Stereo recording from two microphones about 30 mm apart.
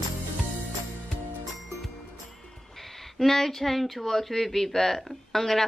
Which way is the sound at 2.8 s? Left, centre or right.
Centre.